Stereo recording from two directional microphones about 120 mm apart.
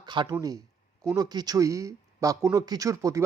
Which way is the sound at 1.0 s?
30° right (ahead or behind).